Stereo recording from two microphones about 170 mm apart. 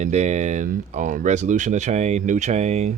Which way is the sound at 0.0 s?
40° right (ahead or behind).